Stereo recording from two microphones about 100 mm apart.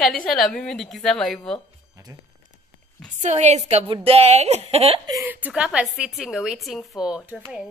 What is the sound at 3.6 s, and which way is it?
Speech, 90° right.